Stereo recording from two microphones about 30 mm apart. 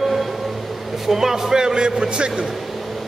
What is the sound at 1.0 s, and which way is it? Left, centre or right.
A man's voice, centre.